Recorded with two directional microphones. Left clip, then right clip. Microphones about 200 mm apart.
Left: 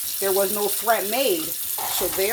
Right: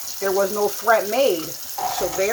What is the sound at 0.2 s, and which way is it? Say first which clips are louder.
Speech: right 2 dB; 20° left (ahead or behind).